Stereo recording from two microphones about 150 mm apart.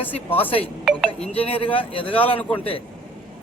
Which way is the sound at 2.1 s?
10° left (ahead or behind).